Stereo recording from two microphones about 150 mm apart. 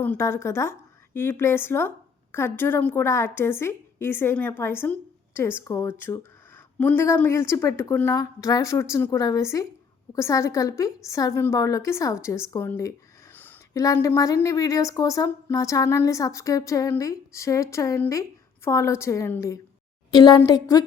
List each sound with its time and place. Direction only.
0.0 s a woman's voice: 15° left (ahead or behind)
13.3 s a sound: 10° left (ahead or behind)
13.7 s speech: 20° left (ahead or behind)